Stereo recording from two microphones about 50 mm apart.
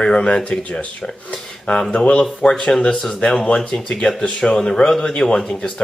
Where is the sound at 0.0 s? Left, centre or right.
Left.